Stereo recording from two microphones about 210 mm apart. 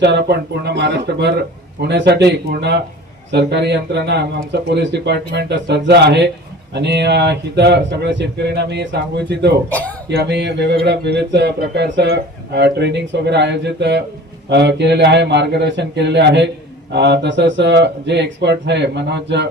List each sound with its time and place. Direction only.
0.0 s a man's voice: 55° right (ahead or behind)
9.6 s speech: 10° left (ahead or behind)
10.1 s a man's voice: 50° right (ahead or behind)